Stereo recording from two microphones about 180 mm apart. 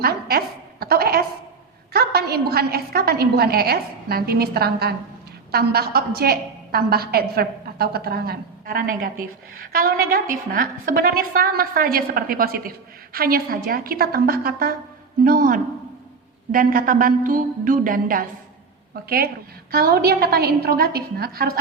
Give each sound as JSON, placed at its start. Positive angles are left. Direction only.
{"t": 0.0, "sound": "a sound", "side_deg": -60}
{"t": 1.9, "sound": "a woman's voice", "side_deg": -60}
{"t": 15.2, "sound": "music", "side_deg": -50}
{"t": 19.0, "sound": "a woman's voice", "side_deg": -55}